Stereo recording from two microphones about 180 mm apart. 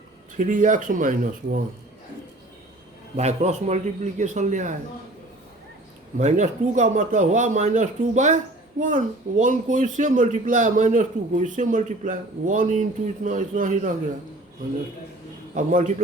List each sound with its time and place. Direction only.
0.3 s speech: 45° right (ahead or behind)
3.2 s a man's voice: 40° right (ahead or behind)
6.1 s speech: 40° right (ahead or behind)
15.5 s speech: 45° right (ahead or behind)